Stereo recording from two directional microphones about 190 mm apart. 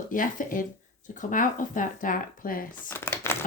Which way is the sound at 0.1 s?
45° left (ahead or behind).